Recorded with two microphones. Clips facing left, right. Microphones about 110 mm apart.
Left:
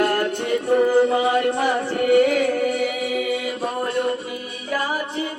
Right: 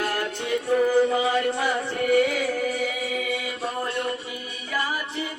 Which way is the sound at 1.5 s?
35° left (ahead or behind).